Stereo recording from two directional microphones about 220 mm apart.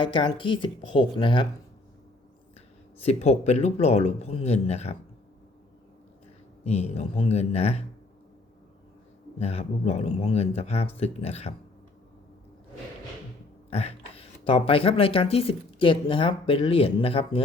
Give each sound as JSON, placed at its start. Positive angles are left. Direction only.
{"t": 0.0, "sound": "speech", "side_deg": 20}
{"t": 2.6, "sound": "speech", "side_deg": 30}
{"t": 6.7, "sound": "speech", "side_deg": 30}
{"t": 9.4, "sound": "speech", "side_deg": 30}
{"t": 13.7, "sound": "speech", "side_deg": 30}